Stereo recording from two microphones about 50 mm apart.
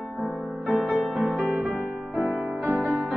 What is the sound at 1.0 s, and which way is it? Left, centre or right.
Music, right.